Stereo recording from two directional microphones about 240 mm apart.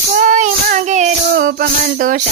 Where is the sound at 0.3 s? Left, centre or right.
Right.